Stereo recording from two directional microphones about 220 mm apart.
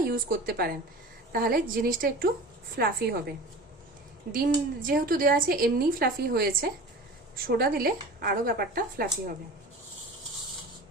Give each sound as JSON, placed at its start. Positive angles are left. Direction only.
{"t": 0.1, "sound": "a woman's voice", "side_deg": -40}
{"t": 4.3, "sound": "a woman's voice", "side_deg": -40}